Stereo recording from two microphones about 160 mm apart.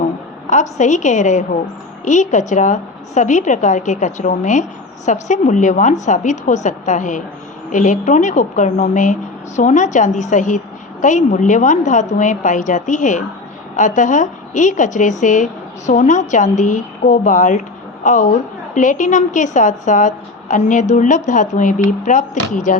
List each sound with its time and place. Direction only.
0.5 s a woman's voice: 50° left (ahead or behind)